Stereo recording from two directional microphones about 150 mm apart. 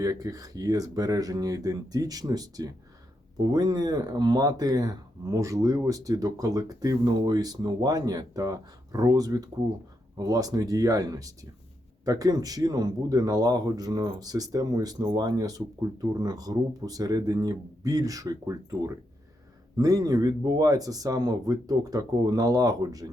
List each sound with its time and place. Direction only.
0.0 s speech: 25° right (ahead or behind)